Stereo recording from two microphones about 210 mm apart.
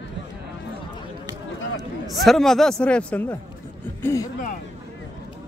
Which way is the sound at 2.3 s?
Centre (ahead or behind).